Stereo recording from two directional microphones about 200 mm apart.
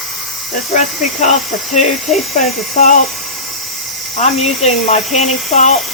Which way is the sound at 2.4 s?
40° left (ahead or behind).